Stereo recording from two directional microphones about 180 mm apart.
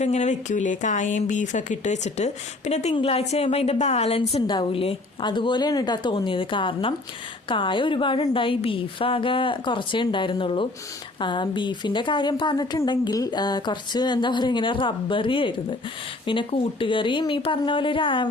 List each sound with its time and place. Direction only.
0.0 s a woman's voice: 40° left (ahead or behind)